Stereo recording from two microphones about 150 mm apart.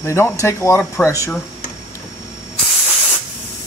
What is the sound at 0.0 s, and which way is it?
Speech, 15° left (ahead or behind).